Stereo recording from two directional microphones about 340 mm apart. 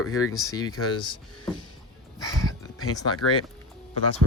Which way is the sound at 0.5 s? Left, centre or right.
Centre.